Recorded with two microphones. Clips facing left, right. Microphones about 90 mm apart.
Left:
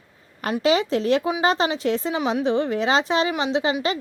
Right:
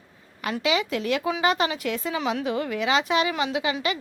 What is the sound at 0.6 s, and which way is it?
A woman's voice, 35° left (ahead or behind).